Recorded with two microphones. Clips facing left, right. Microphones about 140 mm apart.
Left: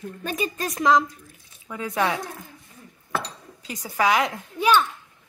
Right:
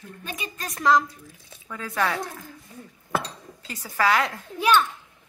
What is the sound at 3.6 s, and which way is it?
Speech, 15° left (ahead or behind).